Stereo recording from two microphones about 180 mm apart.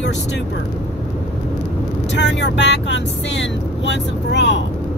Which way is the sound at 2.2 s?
75° left (ahead or behind).